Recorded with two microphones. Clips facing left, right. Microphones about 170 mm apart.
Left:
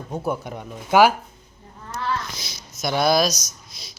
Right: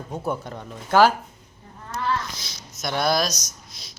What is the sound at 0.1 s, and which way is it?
Speech, 10° left (ahead or behind).